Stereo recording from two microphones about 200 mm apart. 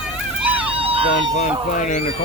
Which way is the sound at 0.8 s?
30° right (ahead or behind).